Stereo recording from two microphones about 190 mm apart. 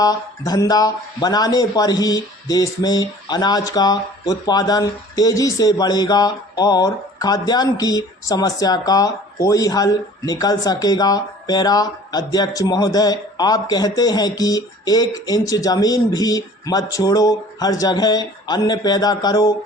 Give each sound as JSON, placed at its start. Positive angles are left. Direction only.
{"t": 0.0, "sound": "speech", "side_deg": 20}